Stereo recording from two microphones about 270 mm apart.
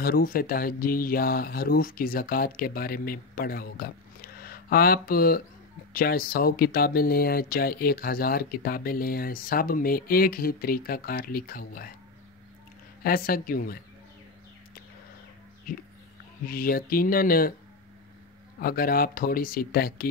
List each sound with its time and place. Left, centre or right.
0.0 s speech: left
13.0 s speech: left
16.4 s speech: left
18.6 s speech: left